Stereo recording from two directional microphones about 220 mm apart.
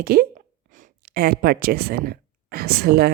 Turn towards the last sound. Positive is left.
turn(degrees=-45)  # may be behind; listen again after turning